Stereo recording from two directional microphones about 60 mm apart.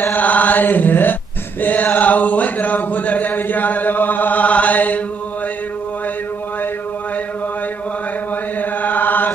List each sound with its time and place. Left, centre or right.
0.0 s chant: left
1.6 s a sound: left
8.5 s chant: left